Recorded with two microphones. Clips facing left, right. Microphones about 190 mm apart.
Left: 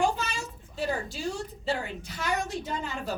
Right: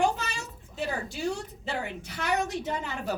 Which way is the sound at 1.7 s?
65° right (ahead or behind).